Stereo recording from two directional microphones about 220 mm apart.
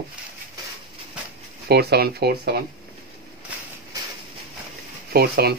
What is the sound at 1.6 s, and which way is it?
Speech, 45° right (ahead or behind).